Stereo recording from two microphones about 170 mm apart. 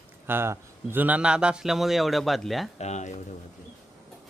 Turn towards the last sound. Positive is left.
turn(degrees=45)  # may be behind; listen again after turning